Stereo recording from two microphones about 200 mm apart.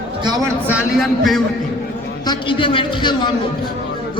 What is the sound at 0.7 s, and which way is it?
Speech, 5° right (ahead or behind).